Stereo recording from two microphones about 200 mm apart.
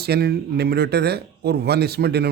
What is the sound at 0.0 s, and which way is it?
Speech, 55° right (ahead or behind).